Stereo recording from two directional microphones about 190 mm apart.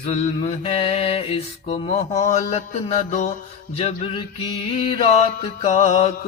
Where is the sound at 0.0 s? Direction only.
35° left (ahead or behind).